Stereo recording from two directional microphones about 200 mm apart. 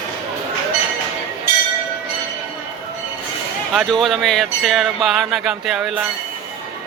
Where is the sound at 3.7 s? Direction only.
Centre (ahead or behind).